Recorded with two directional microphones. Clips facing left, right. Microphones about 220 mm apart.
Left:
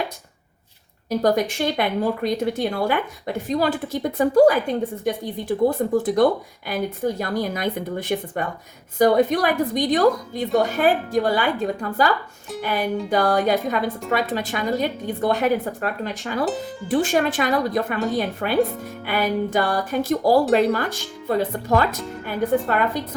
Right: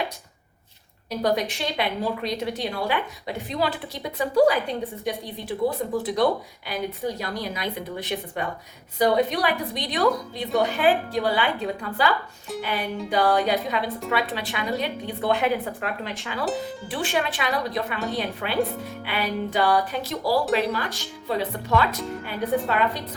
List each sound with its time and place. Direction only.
1.2 s a woman's voice: 45° left (ahead or behind)